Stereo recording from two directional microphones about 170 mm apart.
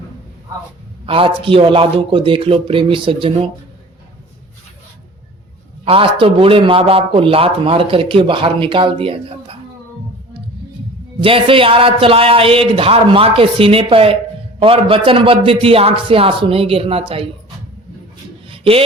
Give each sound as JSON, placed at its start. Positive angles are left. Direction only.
{"t": 1.0, "sound": "a man's voice", "side_deg": -30}
{"t": 5.8, "sound": "a man's voice", "side_deg": -30}
{"t": 11.2, "sound": "a man's voice", "side_deg": -30}
{"t": 18.4, "sound": "a sound", "side_deg": -30}